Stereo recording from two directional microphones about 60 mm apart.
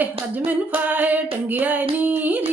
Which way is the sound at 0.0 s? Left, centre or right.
Right.